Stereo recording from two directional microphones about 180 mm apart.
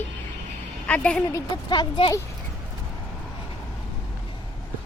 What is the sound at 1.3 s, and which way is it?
Speech, 20° left (ahead or behind).